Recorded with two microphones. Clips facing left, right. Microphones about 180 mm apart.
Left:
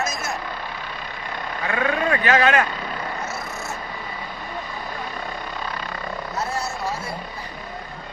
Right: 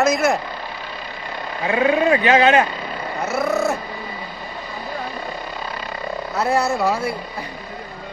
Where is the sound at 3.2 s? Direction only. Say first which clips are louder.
Right 11 dB; 65° right (ahead or behind).